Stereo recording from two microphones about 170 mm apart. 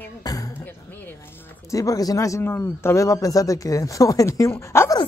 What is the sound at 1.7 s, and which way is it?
Speech, 20° left (ahead or behind).